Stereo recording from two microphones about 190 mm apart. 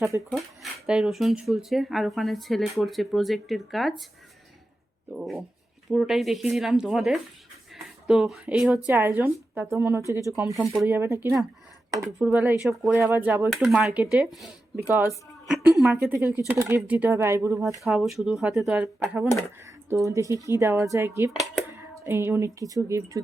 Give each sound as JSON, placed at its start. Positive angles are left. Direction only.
{"t": 0.3, "sound": "speech", "side_deg": 0}
{"t": 5.1, "sound": "a woman's voice", "side_deg": 0}
{"t": 16.0, "sound": "speech", "side_deg": -15}
{"t": 17.7, "sound": "speech", "side_deg": 0}